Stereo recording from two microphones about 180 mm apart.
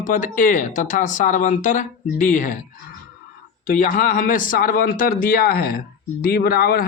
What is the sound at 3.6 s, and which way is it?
A man's voice, 45° left (ahead or behind).